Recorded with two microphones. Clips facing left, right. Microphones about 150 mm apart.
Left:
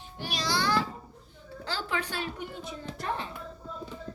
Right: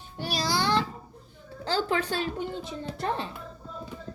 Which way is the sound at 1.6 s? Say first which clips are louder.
Right 6 dB; 35° right (ahead or behind).